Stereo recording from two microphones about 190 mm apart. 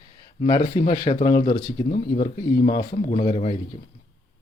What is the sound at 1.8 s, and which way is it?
Speech, 40° left (ahead or behind).